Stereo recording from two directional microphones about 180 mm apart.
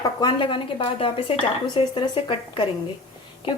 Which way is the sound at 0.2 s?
25° left (ahead or behind).